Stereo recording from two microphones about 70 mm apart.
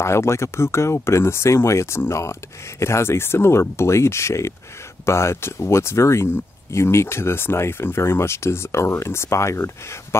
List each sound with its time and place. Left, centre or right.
0.0 s speech: left